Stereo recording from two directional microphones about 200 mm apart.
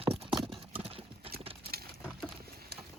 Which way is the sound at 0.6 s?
30° right (ahead or behind).